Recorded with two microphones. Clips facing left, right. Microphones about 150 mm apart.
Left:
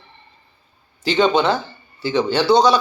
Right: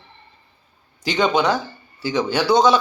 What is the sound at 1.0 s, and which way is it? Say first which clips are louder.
Speech: left 2 dB; 15° right (ahead or behind).